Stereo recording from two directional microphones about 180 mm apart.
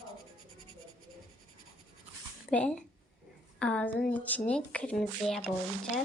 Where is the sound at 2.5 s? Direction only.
5° left (ahead or behind).